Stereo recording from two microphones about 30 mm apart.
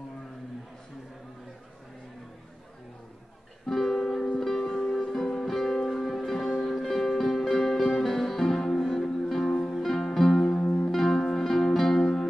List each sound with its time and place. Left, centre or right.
3.6 s music: centre
10.6 s music: left
10.9 s music: centre